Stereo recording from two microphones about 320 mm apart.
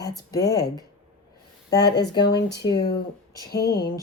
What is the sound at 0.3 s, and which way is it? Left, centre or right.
Speech, centre.